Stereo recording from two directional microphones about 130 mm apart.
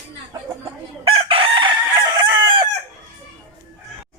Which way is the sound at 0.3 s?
30° right (ahead or behind).